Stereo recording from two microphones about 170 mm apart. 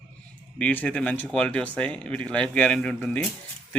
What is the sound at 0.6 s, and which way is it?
Speech, 10° left (ahead or behind).